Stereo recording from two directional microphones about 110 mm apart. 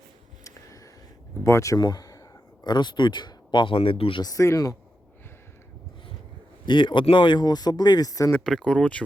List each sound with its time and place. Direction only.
1.5 s speech: 25° left (ahead or behind)
1.8 s a sound: 35° left (ahead or behind)
2.6 s speech: 40° left (ahead or behind)
4.2 s speech: 30° left (ahead or behind)
6.7 s speech: 45° left (ahead or behind)
8.4 s speech: 5° left (ahead or behind)